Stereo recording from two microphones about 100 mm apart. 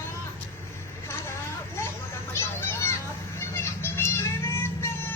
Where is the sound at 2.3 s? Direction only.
25° left (ahead or behind).